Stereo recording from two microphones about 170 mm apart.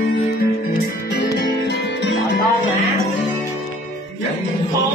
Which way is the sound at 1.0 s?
75° left (ahead or behind).